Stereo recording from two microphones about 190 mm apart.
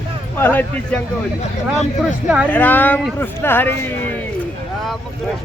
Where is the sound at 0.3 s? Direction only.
10° left (ahead or behind).